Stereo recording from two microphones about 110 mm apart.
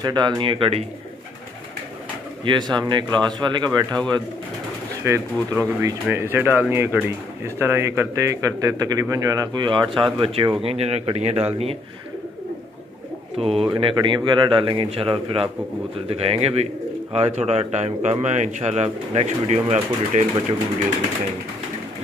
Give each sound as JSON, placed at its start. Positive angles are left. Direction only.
{"t": 0.0, "sound": "speech", "side_deg": -40}
{"t": 0.4, "sound": "speech", "side_deg": -50}
{"t": 2.4, "sound": "speech", "side_deg": -40}
{"t": 5.0, "sound": "speech", "side_deg": -25}
{"t": 9.7, "sound": "speech", "side_deg": -45}
{"t": 10.2, "sound": "a man's voice", "side_deg": -55}
{"t": 13.4, "sound": "a man's voice", "side_deg": -60}
{"t": 14.9, "sound": "a man's voice", "side_deg": -60}